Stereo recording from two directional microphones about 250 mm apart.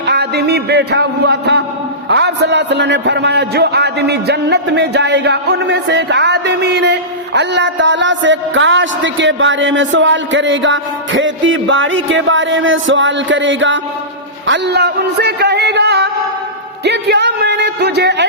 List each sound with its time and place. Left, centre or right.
0.0 s a man's voice: right
14.4 s a sound: right
16.8 s music: right